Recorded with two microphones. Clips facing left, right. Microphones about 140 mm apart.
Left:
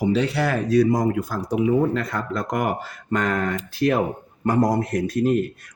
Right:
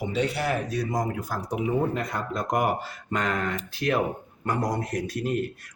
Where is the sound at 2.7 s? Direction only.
50° left (ahead or behind).